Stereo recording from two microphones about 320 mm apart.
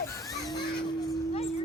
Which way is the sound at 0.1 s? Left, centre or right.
Centre.